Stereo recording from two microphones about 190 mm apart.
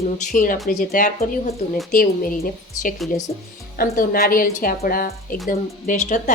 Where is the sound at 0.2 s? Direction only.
45° left (ahead or behind).